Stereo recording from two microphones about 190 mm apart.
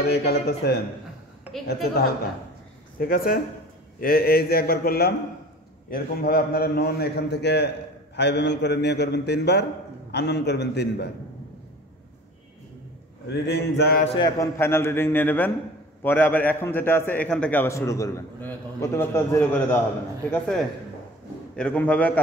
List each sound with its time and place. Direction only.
0.0 s a man's voice: 60° left (ahead or behind)
13.3 s a man's voice: 60° left (ahead or behind)
14.1 s a man's voice: 20° left (ahead or behind)